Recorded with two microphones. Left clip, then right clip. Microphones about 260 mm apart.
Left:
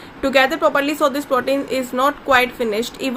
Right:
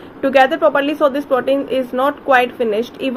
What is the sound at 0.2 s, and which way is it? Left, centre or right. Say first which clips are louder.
Speech: right 3 dB; centre.